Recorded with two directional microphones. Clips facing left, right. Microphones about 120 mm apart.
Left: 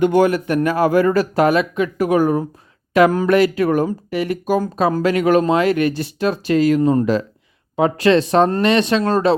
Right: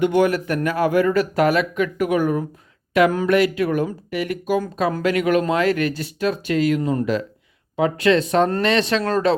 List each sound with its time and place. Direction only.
0.0 s speech: 40° left (ahead or behind)
0.3 s speech: 25° left (ahead or behind)
5.5 s speech: 20° left (ahead or behind)